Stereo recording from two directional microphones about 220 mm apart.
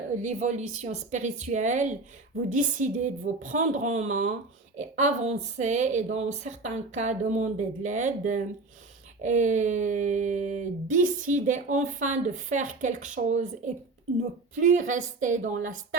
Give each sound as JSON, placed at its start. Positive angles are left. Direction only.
{"t": 0.2, "sound": "speech", "side_deg": -35}